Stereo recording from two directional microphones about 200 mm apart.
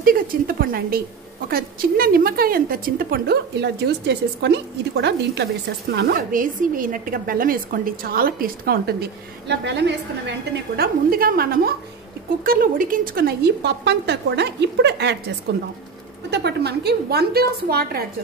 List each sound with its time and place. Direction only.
0.0 s a woman's voice: 45° right (ahead or behind)
10.8 s a woman's voice: 45° right (ahead or behind)